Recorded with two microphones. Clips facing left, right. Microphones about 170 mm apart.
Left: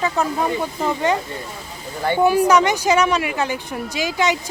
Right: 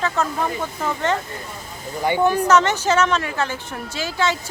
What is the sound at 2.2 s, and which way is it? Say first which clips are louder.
A woman's voice: left 2 dB; 10° left (ahead or behind).